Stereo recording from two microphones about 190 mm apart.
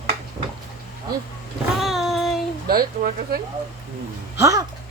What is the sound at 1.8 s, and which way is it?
Child singing, centre (ahead or behind).